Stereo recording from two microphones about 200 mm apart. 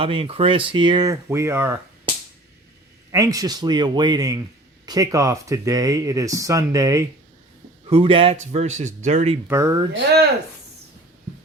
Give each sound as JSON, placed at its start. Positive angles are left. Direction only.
{"t": 0.0, "sound": "speech", "side_deg": -25}
{"t": 3.1, "sound": "speech", "side_deg": -15}
{"t": 7.9, "sound": "speech", "side_deg": -30}
{"t": 9.5, "sound": "speech", "side_deg": -15}